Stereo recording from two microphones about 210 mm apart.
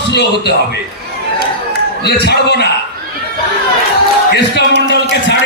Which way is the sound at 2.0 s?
50° left (ahead or behind).